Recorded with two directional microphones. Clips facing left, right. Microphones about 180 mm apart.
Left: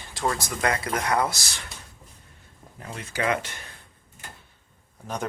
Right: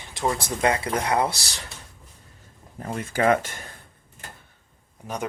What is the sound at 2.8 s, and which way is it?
Speech, 45° right (ahead or behind).